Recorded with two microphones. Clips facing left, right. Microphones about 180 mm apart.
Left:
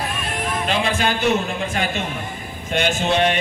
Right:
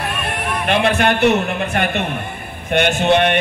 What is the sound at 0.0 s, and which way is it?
A man's voice, 65° right (ahead or behind).